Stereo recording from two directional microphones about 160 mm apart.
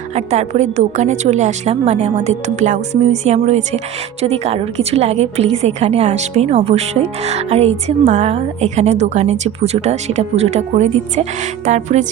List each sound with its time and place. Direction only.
0.1 s a woman's voice: 45° right (ahead or behind)